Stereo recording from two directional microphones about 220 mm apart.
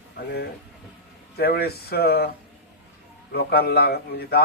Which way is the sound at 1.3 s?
45° left (ahead or behind).